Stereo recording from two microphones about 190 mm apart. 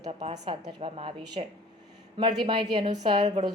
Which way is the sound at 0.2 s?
30° right (ahead or behind).